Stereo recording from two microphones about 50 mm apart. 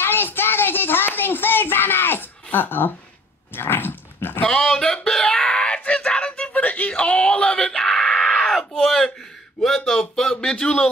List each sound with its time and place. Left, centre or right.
0.0 s child singing: left
3.5 s dog: left
4.5 s a sound: centre
9.6 s speech: centre